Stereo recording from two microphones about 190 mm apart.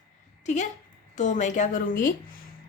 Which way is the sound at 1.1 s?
40° left (ahead or behind).